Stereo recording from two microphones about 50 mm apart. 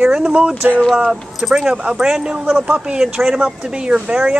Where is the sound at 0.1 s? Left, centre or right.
Centre.